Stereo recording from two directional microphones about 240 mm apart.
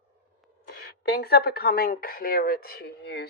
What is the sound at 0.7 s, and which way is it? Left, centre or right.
Speech, left.